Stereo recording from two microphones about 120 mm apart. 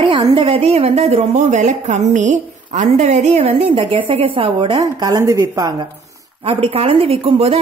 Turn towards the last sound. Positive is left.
turn(degrees=-55)  # may be behind; listen again after turning